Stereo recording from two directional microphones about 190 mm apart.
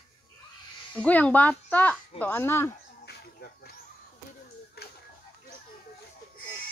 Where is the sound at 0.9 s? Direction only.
5° left (ahead or behind).